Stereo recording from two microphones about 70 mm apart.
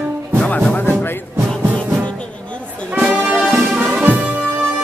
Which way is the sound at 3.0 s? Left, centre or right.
Right.